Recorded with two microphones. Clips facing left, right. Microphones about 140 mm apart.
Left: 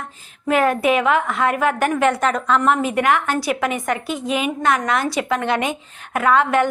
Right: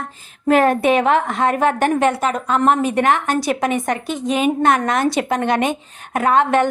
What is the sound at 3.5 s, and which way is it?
A woman's voice, 25° right (ahead or behind).